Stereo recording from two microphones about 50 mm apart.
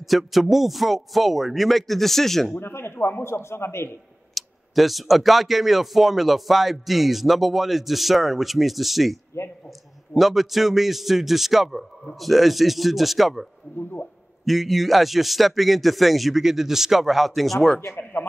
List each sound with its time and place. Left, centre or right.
0.3 s speech: centre
2.5 s speech: left
4.3 s speech: centre
17.7 s speech: left